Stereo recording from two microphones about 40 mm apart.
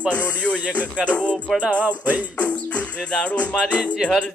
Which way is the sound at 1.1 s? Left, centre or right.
Left.